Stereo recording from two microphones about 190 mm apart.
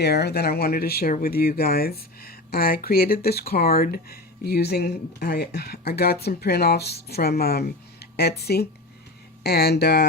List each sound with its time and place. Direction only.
0.0 s speech: 60° left (ahead or behind)